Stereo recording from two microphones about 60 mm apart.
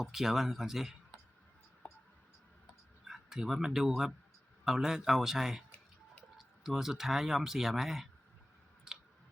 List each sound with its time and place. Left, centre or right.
0.0 s speech: centre
1.8 s a sound: left
3.1 s speech: centre
8.9 s clicking: centre